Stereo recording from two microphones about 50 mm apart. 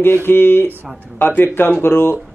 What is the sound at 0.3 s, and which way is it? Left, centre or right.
Speech, left.